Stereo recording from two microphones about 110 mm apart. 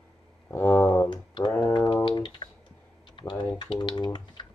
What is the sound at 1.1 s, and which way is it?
Typing, 45° left (ahead or behind).